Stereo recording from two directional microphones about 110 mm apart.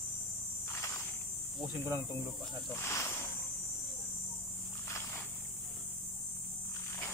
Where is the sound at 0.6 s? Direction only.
25° left (ahead or behind).